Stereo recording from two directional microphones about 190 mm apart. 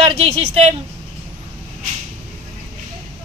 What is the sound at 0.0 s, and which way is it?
Speech, 30° right (ahead or behind).